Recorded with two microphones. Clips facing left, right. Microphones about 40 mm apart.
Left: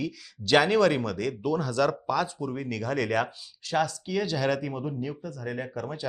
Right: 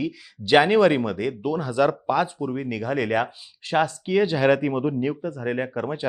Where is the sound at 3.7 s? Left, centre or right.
Right.